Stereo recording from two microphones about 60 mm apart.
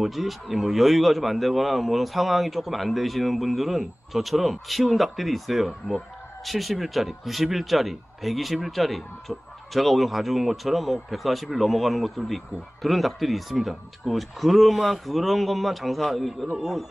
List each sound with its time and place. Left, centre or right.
0.0 s a man's voice: centre